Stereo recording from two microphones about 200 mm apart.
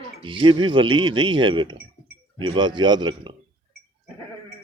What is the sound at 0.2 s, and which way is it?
Speech, 25° right (ahead or behind).